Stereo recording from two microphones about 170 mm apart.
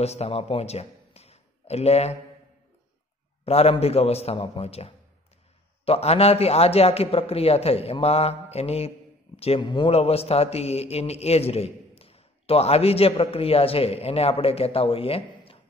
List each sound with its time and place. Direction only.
0.0 s a man's voice: 40° left (ahead or behind)
3.4 s a man's voice: 35° left (ahead or behind)